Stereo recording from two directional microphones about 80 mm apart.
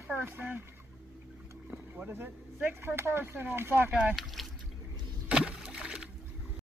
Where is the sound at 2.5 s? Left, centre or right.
Right.